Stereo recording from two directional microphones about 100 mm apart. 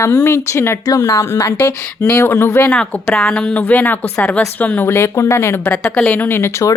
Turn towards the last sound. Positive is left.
turn(degrees=25)  # may be behind; listen again after turning